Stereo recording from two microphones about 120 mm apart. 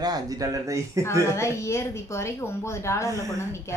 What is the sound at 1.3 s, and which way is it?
A woman's voice, 25° left (ahead or behind).